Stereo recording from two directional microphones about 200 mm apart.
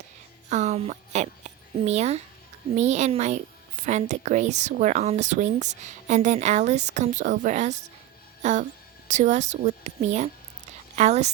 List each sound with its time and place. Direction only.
0.5 s speech: 35° right (ahead or behind)
8.4 s music: 35° right (ahead or behind)
9.0 s speech: 35° right (ahead or behind)